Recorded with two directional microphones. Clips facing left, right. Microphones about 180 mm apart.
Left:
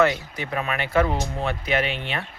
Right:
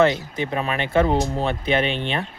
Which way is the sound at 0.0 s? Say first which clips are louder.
Right 3 dB; 25° right (ahead or behind).